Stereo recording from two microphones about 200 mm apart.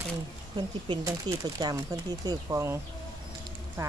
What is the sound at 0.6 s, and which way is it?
Speech, 25° right (ahead or behind).